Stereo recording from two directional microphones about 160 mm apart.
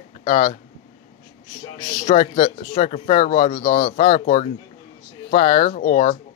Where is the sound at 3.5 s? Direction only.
60° left (ahead or behind).